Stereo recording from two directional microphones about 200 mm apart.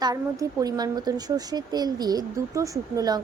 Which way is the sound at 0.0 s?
20° right (ahead or behind).